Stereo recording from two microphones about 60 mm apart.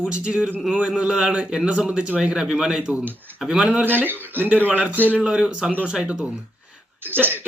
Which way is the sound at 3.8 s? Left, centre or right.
Right.